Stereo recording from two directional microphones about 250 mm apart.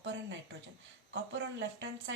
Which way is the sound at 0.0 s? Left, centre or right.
Right.